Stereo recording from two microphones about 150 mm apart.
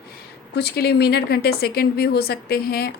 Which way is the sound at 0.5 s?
90° left.